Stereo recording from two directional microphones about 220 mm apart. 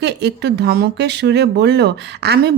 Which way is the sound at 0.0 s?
50° right (ahead or behind).